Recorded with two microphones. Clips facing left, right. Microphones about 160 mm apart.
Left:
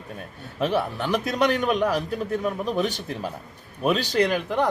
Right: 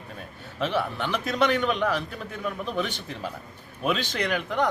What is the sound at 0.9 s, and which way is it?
Speech, 40° left (ahead or behind).